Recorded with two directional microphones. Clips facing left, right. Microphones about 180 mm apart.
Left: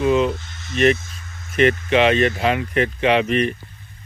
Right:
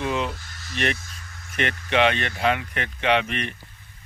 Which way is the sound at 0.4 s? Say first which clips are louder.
Left 10 dB; 20° left (ahead or behind).